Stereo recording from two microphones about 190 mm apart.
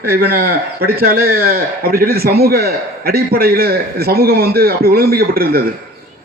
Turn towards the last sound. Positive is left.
turn(degrees=-50)  # may be behind; listen again after turning